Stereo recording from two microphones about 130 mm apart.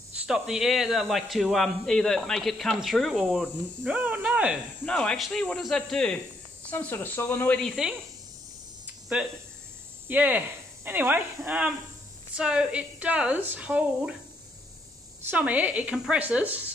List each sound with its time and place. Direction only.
0.3 s speech: 5° right (ahead or behind)
4.8 s speech: 5° left (ahead or behind)
7.6 s speech: 5° right (ahead or behind)
9.1 s speech: 10° right (ahead or behind)
15.2 s speech: 10° right (ahead or behind)